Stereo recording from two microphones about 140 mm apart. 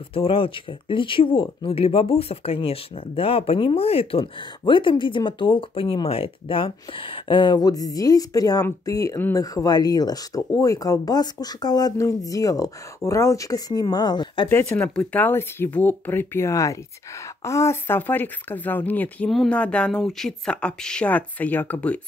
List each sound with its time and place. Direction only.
0.1 s speech: 40° left (ahead or behind)
14.8 s speech: 10° left (ahead or behind)